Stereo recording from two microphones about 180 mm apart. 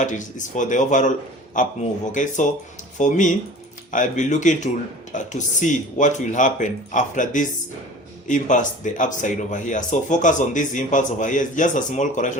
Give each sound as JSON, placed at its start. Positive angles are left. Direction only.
{"t": 0.0, "sound": "speech", "side_deg": 45}